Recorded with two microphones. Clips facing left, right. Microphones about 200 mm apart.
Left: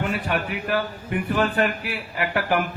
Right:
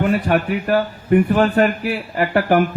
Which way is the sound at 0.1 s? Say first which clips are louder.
Right 8 dB; 45° right (ahead or behind).